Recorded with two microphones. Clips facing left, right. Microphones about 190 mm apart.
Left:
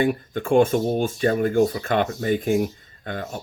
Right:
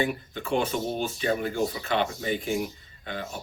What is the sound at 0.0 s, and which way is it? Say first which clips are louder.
Speech: left 6 dB; 50° left (ahead or behind).